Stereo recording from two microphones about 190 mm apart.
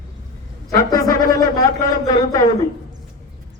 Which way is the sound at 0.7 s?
20° left (ahead or behind).